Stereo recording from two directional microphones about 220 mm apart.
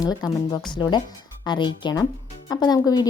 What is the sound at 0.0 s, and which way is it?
Speech, 20° left (ahead or behind).